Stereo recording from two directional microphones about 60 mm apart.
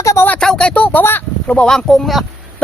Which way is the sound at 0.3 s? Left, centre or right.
Centre.